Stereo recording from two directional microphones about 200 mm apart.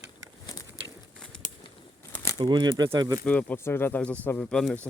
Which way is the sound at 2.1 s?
15° left (ahead or behind).